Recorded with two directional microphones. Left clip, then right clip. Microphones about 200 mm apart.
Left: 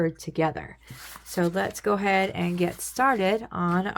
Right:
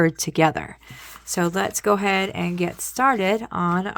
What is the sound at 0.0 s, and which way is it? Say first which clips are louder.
Speech: right 7 dB; 45° right (ahead or behind).